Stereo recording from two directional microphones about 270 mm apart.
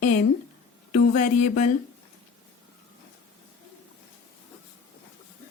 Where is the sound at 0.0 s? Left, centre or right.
Left.